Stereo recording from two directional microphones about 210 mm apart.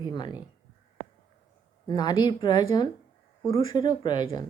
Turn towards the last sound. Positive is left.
turn(degrees=20)  # may be behind; listen again after turning